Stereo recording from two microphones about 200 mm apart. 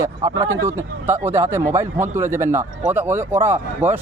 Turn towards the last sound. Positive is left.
turn(degrees=-10)  # may be behind; listen again after turning